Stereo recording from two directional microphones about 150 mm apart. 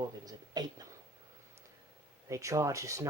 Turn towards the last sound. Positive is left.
turn(degrees=-20)  # may be behind; listen again after turning